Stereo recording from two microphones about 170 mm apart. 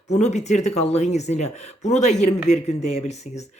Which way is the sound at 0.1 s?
40° left (ahead or behind).